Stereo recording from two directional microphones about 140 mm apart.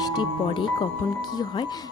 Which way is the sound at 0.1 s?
35° left (ahead or behind).